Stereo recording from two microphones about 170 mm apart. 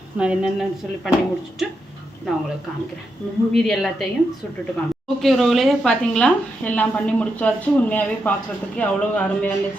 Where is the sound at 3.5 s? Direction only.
Centre (ahead or behind).